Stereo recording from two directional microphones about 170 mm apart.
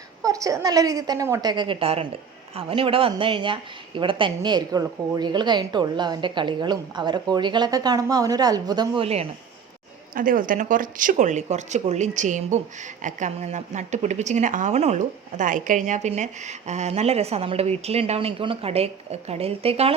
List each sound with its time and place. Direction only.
0.2 s speech: 20° right (ahead or behind); by 9.2 s 35° right (ahead or behind)
10.2 s speech: 55° right (ahead or behind); by 20.0 s 35° right (ahead or behind)